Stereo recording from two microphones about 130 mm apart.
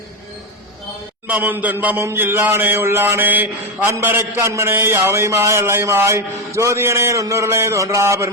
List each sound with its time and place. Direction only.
1.3 s a man's voice: 15° right (ahead or behind)